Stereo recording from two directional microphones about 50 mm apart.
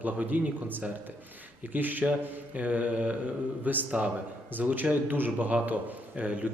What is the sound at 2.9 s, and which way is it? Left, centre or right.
Mantra, right.